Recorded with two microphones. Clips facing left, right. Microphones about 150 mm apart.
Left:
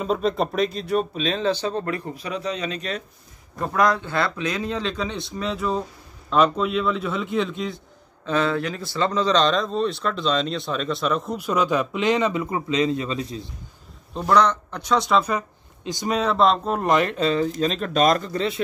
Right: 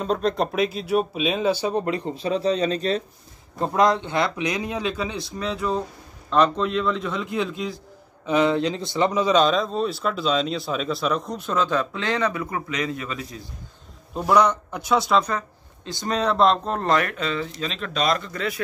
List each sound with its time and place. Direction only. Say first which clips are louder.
0.0 s speech: even; 5° left (ahead or behind)
8.3 s speech: right 3 dB; 15° right (ahead or behind); by 13.4 s 30° left (ahead or behind)
14.1 s speech: even; 10° right (ahead or behind); by 16.2 s 15° left (ahead or behind)
16.2 s speech: right 1 dB; centre (ahead or behind)
16.8 s speech: left 4 dB; 20° left (ahead or behind)